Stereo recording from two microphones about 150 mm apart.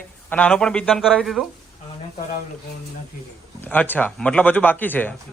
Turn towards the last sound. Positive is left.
turn(degrees=10)  # may be behind; listen again after turning